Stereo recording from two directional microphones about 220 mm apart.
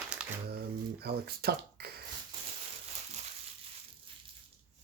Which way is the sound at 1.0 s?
45° right (ahead or behind).